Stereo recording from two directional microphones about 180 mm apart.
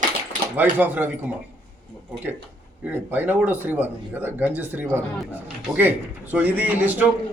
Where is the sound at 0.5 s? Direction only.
10° right (ahead or behind).